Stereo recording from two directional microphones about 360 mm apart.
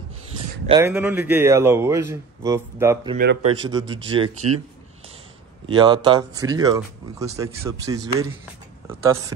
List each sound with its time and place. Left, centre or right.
0.7 s speech: centre
3.2 s speech: right
3.5 s speech: centre
5.7 s speech: centre